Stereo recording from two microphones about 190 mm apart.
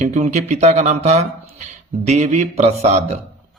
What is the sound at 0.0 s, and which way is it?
Speech, 40° right (ahead or behind).